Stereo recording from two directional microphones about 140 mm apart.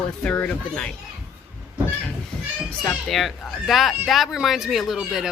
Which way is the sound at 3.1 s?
Centre (ahead or behind).